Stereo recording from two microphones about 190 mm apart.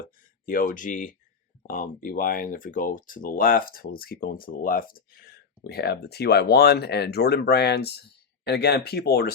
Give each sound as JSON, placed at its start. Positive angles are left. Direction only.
{"t": 0.0, "sound": "speech", "side_deg": 45}